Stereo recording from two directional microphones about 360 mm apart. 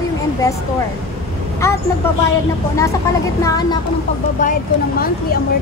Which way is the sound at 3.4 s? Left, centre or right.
Centre.